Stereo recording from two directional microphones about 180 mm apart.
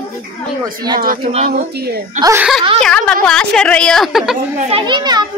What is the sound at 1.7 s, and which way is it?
Speech, 65° right (ahead or behind).